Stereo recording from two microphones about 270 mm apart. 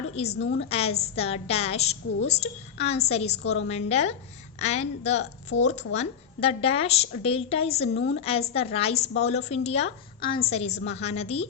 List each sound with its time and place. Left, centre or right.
0.3 s a woman's voice: left
0.7 s a woman's voice: left